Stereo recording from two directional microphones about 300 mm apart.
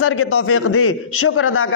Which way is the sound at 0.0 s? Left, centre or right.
Left.